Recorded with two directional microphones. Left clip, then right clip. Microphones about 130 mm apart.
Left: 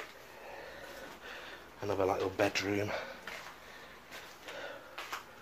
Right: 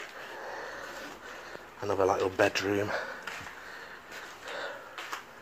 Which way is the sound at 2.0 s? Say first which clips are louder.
Right 6 dB; 10° right (ahead or behind).